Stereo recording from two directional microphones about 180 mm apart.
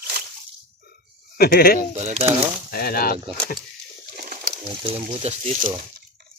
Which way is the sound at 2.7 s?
55° left (ahead or behind).